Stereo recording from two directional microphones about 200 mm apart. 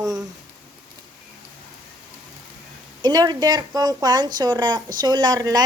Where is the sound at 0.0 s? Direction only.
20° right (ahead or behind).